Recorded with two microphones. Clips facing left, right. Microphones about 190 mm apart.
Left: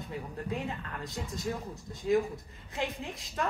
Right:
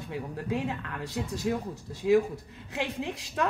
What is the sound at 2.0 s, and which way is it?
Speech, 85° right.